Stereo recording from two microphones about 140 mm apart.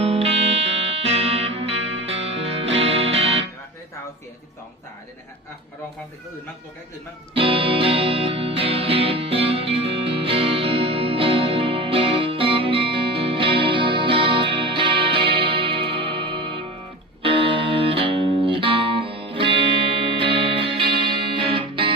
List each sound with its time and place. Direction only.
0.0 s music: 45° right (ahead or behind)
7.3 s music: 40° right (ahead or behind)